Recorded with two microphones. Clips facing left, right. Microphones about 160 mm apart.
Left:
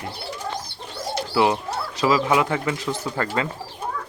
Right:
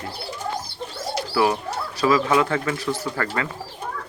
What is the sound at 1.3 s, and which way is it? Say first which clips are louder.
Speech: left 1 dB; 20° left (ahead or behind).